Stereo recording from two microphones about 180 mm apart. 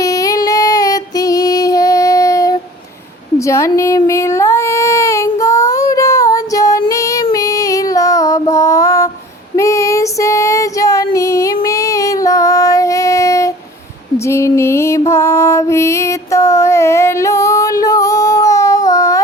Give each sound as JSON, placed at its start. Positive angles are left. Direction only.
{"t": 0.0, "sound": "female singing", "side_deg": 20}
{"t": 3.3, "sound": "baby cry", "side_deg": 15}
{"t": 7.3, "sound": "female singing", "side_deg": 20}
{"t": 9.6, "sound": "child singing", "side_deg": 15}
{"t": 11.1, "sound": "female singing", "side_deg": 15}
{"t": 14.3, "sound": "music", "side_deg": 15}